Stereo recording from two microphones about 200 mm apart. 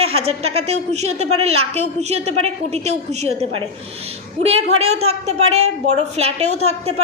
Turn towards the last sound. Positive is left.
turn(degrees=-35)  # may be behind; listen again after turning